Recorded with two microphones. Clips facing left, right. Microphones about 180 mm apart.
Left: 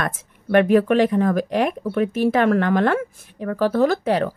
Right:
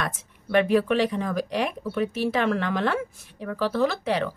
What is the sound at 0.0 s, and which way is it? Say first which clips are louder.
Speech: left 4 dB; 55° left (ahead or behind).